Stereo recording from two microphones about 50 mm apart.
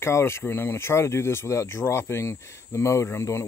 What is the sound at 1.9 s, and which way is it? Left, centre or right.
Speech, left.